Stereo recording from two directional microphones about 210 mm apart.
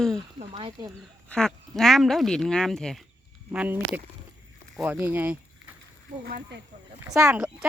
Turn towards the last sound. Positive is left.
turn(degrees=-5)  # may be behind; listen again after turning